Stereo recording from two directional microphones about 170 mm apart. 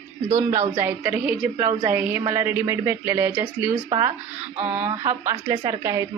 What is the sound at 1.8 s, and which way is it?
A woman's voice, 15° right (ahead or behind).